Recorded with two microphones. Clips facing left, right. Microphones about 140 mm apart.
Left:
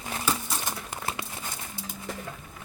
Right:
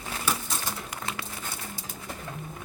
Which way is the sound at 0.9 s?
30° left (ahead or behind).